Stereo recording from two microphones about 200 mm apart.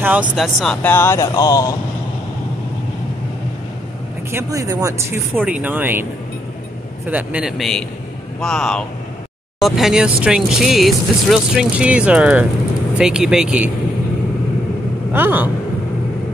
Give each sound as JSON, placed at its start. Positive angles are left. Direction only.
{"t": 0.0, "sound": "speech", "side_deg": -5}
{"t": 4.3, "sound": "speech", "side_deg": -15}
{"t": 7.1, "sound": "speech", "side_deg": -5}
{"t": 15.1, "sound": "speech", "side_deg": -10}